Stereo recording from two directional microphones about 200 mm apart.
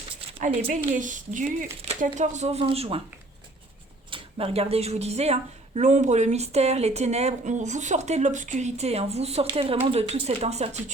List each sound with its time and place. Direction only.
0.3 s speech: 40° right (ahead or behind)
4.1 s speech: 30° right (ahead or behind)